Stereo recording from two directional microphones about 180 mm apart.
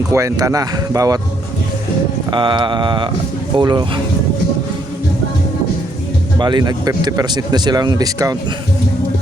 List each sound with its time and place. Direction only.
0.1 s speech: 15° right (ahead or behind)
2.3 s speech: 25° right (ahead or behind)
6.4 s speech: 25° right (ahead or behind)